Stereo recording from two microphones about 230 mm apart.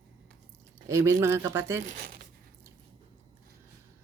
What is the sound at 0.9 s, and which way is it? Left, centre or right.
Speech, centre.